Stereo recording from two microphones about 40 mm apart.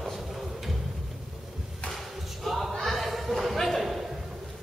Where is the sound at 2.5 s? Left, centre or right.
Centre.